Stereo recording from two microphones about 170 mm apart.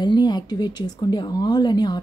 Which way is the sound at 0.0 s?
25° left (ahead or behind).